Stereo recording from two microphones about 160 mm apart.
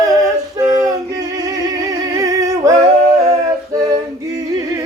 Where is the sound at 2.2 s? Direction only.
20° right (ahead or behind).